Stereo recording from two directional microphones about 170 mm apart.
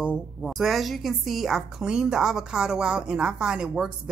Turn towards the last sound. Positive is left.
turn(degrees=-5)  # may be behind; listen again after turning